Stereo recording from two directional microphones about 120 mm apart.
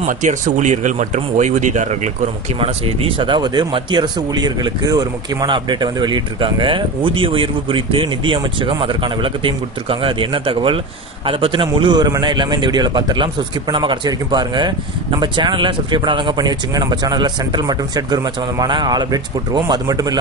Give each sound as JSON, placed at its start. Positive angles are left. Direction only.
{"t": 0.0, "sound": "speech", "side_deg": -85}
{"t": 2.6, "sound": "a man's voice", "side_deg": -50}